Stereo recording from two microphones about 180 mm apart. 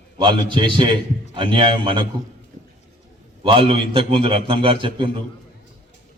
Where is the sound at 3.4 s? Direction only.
30° right (ahead or behind).